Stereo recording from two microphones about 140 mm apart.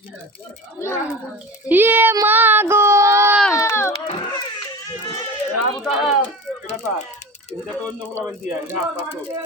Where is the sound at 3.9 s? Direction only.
40° left (ahead or behind).